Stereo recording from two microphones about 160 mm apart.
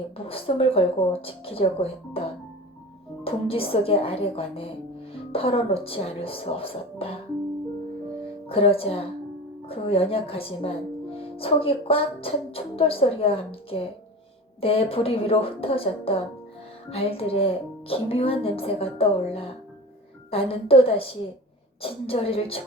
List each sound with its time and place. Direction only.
0.3 s speech: 35° left (ahead or behind)
3.2 s speech: 35° left (ahead or behind)
8.4 s speech: 35° left (ahead or behind)